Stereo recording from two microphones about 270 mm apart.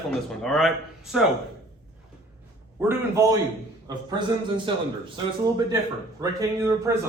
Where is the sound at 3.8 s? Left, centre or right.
Centre.